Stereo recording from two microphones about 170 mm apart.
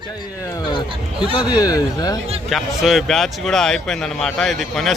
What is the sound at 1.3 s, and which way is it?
Speech, 25° left (ahead or behind).